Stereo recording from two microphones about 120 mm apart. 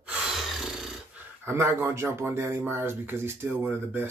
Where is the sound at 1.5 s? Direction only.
25° right (ahead or behind).